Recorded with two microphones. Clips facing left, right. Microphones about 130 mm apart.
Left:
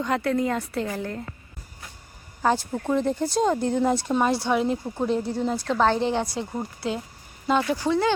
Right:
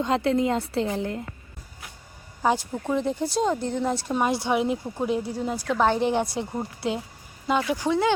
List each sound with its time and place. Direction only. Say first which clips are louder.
0.0 s a woman's voice: right 1 dB; 20° right (ahead or behind)
2.4 s a woman's voice: left 1 dB; 5° right (ahead or behind)
3.4 s speech: left 4 dB; centre (ahead or behind)
4.3 s a woman's voice: left 1 dB; 15° right (ahead or behind)
7.4 s a woman's voice: left 1 dB; 10° right (ahead or behind)